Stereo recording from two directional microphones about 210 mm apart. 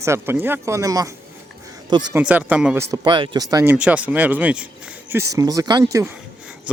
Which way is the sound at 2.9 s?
20° right (ahead or behind).